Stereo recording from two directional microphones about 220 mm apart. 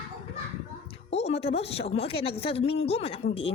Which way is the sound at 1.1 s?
30° left (ahead or behind).